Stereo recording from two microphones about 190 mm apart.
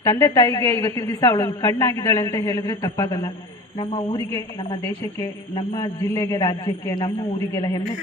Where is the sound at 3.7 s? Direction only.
25° left (ahead or behind).